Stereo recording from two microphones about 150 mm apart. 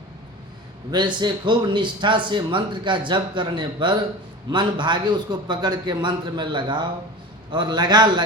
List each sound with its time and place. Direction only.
0.9 s a man's voice: 30° right (ahead or behind)